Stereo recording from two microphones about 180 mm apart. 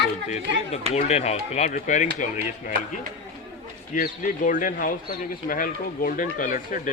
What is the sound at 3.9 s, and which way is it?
Speech, 45° left (ahead or behind).